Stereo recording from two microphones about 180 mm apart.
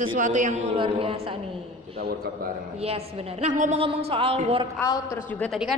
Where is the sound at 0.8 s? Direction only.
30° right (ahead or behind).